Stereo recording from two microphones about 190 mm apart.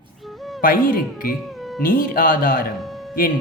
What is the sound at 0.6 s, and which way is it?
Speech, 45° left (ahead or behind).